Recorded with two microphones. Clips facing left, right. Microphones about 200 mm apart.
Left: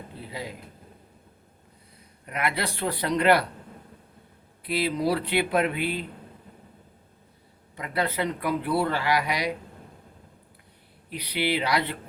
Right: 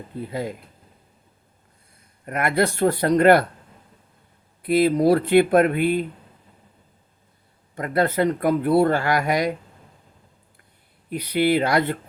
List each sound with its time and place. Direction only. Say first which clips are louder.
0.2 s speech: right 9 dB; 50° right (ahead or behind)
2.2 s speech: right 8 dB; 50° right (ahead or behind)
4.6 s speech: right 8 dB; 50° right (ahead or behind)
7.8 s speech: right 7 dB; 45° right (ahead or behind)
11.1 s speech: right 8 dB; 45° right (ahead or behind)